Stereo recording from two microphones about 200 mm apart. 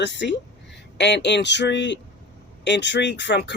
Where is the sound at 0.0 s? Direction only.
60° left (ahead or behind).